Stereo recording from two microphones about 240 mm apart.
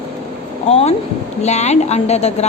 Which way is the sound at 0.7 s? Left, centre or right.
Left.